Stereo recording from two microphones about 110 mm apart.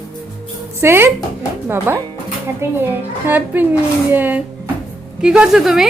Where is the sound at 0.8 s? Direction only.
20° right (ahead or behind); by 5.9 s 5° right (ahead or behind).